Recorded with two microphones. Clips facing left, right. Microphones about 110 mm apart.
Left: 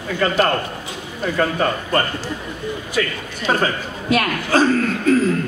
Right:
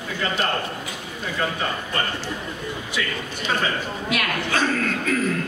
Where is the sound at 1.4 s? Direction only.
55° left (ahead or behind); by 5.2 s 35° left (ahead or behind).